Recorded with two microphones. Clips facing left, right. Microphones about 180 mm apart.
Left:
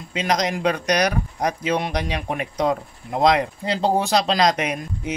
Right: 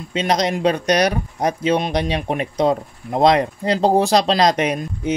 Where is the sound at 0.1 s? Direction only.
30° right (ahead or behind).